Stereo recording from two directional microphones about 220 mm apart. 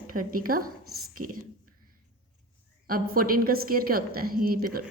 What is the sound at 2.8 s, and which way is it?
A woman's voice, 40° right (ahead or behind).